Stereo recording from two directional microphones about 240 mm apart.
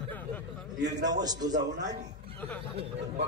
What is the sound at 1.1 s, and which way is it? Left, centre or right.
Speech, centre.